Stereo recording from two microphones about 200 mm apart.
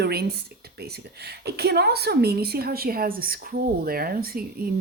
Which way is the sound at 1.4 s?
55° right (ahead or behind).